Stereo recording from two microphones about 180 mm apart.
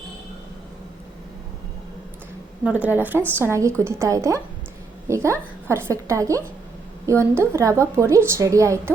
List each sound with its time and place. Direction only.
2.6 s a woman's voice: 10° right (ahead or behind)